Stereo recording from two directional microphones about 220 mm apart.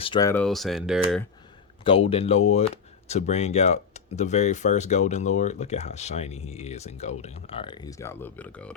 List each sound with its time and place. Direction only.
0.0 s speech: 20° left (ahead or behind)
0.4 s speech: centre (ahead or behind)
1.8 s speech: 25° left (ahead or behind); by 8.7 s 5° left (ahead or behind)